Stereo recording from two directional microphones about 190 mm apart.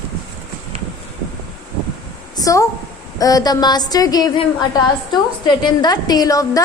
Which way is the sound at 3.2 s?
20° left (ahead or behind).